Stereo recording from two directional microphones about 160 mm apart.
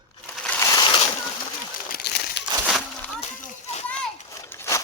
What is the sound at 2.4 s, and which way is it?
Crumpling, 90° left.